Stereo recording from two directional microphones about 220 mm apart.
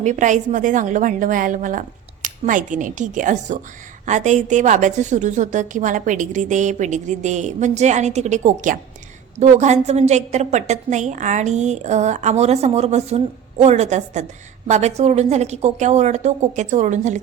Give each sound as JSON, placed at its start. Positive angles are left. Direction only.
{"t": 0.0, "sound": "a woman's voice", "side_deg": -35}